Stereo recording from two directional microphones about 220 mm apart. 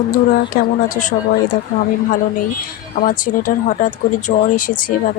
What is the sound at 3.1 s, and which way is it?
Speech, 40° left (ahead or behind).